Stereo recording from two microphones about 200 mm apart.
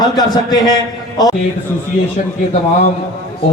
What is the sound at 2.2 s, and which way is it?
Speech, 40° left (ahead or behind).